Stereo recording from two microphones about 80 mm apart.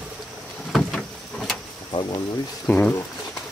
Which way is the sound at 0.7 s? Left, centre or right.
Centre.